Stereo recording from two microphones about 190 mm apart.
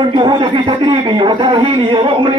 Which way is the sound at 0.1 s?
25° right (ahead or behind).